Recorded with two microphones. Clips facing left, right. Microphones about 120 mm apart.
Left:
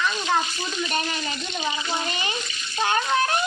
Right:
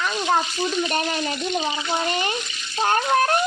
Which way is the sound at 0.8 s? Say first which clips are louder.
Right 4 dB; 45° right (ahead or behind).